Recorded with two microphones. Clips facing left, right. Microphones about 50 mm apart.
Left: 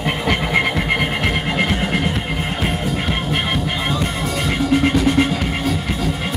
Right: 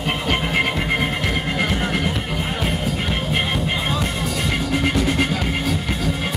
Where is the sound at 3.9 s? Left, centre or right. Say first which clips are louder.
Left 2 dB; left.